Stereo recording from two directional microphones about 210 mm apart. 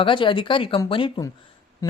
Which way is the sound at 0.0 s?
25° left (ahead or behind).